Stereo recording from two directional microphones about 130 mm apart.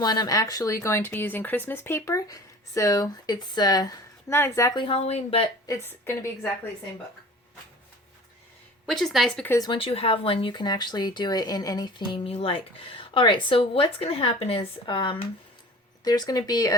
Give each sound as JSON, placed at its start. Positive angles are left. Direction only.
{"t": 0.0, "sound": "speech", "side_deg": 30}
{"t": 4.7, "sound": "speech", "side_deg": 35}
{"t": 4.9, "sound": "speech", "side_deg": 50}
{"t": 5.6, "sound": "speech", "side_deg": 20}
{"t": 8.9, "sound": "speech", "side_deg": 5}
{"t": 9.6, "sound": "speech", "side_deg": 40}
{"t": 16.0, "sound": "speech", "side_deg": 30}